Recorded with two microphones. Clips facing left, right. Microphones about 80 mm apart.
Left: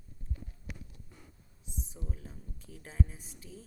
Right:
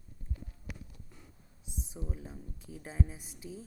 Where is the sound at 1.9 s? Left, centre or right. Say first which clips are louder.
Right 3 dB; centre.